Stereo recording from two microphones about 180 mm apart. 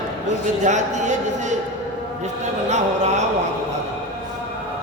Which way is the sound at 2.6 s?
40° right (ahead or behind).